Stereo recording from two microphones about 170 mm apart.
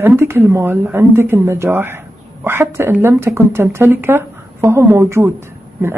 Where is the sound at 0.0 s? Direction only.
15° right (ahead or behind).